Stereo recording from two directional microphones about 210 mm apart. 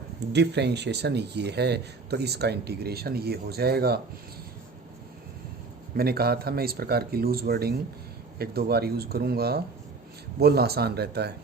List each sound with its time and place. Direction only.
0.3 s speech: 55° right (ahead or behind)
5.9 s speech: 45° right (ahead or behind)